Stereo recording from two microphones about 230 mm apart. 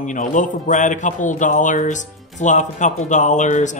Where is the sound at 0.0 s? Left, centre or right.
Left.